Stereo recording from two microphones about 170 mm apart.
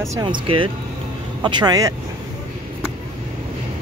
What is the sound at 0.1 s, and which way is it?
Speech, 25° right (ahead or behind).